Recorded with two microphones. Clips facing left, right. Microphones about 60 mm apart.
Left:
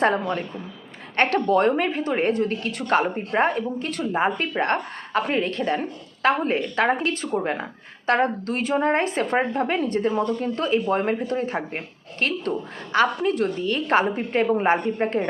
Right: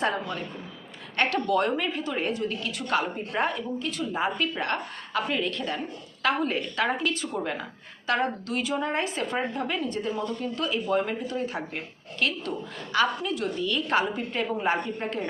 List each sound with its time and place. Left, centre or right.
0.0 s speech: left